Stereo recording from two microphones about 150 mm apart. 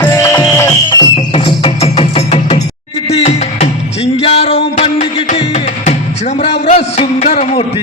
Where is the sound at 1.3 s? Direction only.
40° left (ahead or behind).